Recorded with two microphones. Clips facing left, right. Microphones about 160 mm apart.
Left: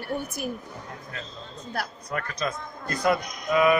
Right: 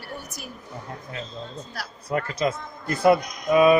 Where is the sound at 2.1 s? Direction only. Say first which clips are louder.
Right 6 dB; 20° right (ahead or behind).